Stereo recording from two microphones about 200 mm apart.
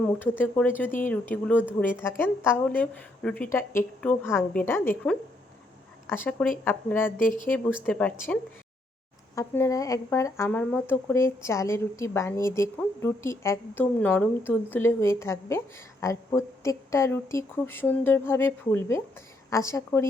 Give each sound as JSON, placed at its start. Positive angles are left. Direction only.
{"t": 0.0, "sound": "speech", "side_deg": 10}
{"t": 7.2, "sound": "speech", "side_deg": 40}
{"t": 7.9, "sound": "speech", "side_deg": 5}
{"t": 9.3, "sound": "speech", "side_deg": 15}